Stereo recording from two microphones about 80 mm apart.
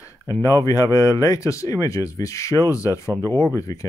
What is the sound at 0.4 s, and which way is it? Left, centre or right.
Speech, left.